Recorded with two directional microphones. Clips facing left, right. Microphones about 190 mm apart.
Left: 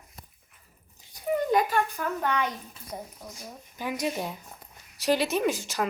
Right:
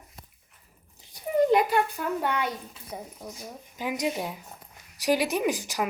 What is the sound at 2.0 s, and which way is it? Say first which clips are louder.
A woman's voice: even; 5° right (ahead or behind).